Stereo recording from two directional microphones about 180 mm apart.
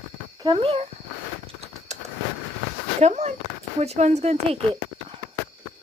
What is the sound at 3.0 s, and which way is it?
A woman's voice, 40° right (ahead or behind).